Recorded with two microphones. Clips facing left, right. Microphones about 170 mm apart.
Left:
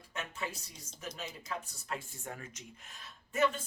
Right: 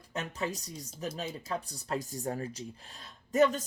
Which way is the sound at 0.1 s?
35° right (ahead or behind).